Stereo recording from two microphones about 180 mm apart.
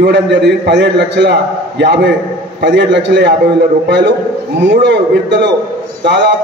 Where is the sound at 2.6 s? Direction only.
75° right (ahead or behind).